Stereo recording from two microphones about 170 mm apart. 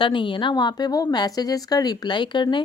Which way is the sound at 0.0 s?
30° left (ahead or behind).